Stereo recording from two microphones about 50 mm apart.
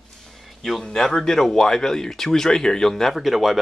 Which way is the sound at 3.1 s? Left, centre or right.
Centre.